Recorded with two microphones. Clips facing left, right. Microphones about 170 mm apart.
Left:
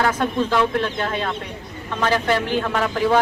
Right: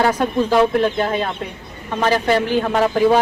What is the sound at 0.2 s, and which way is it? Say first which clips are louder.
Speech: right 4 dB; 15° right (ahead or behind).